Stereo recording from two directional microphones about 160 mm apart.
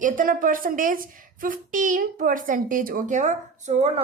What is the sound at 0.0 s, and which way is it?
A woman's voice, 55° right (ahead or behind).